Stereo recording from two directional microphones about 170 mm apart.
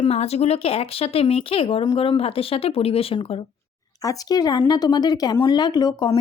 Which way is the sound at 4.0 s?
20° left (ahead or behind).